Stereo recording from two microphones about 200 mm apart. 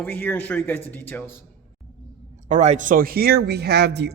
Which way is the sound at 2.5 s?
35° right (ahead or behind).